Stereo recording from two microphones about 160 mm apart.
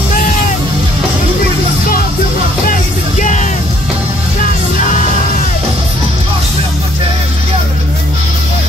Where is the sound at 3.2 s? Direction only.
50° left (ahead or behind).